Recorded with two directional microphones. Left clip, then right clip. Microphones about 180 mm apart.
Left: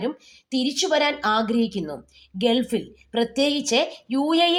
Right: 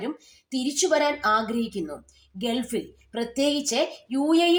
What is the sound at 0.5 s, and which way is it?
A woman's voice, 15° left (ahead or behind).